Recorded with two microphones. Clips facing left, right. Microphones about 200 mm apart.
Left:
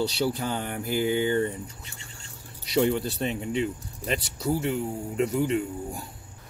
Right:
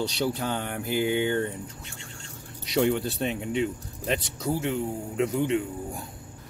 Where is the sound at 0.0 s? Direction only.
Centre (ahead or behind).